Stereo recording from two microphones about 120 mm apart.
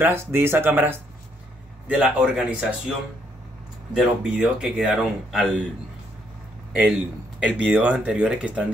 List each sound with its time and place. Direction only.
0.0 s speech: 20° right (ahead or behind)
3.9 s speech: centre (ahead or behind)
6.7 s speech: 10° right (ahead or behind)